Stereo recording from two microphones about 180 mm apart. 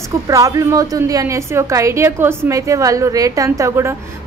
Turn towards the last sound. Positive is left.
turn(degrees=-15)  # may be behind; listen again after turning